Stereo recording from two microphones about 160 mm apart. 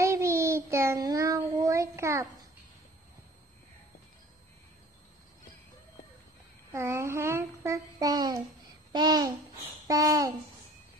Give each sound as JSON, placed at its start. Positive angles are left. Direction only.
{"t": 0.0, "sound": "child singing", "side_deg": -15}
{"t": 6.7, "sound": "child singing", "side_deg": -15}
{"t": 8.9, "sound": "babbling", "side_deg": -25}
{"t": 9.8, "sound": "speech", "side_deg": -20}